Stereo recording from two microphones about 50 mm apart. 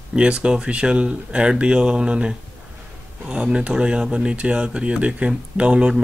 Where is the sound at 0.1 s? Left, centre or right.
Right.